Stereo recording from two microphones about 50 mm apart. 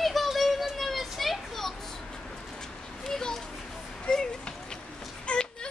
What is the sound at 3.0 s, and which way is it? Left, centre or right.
Children playing, centre.